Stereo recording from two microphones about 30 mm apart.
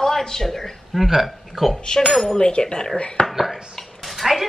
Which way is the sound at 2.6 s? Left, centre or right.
Left.